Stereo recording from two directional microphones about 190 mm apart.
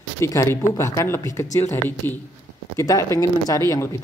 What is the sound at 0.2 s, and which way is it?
A woman's voice, 15° left (ahead or behind).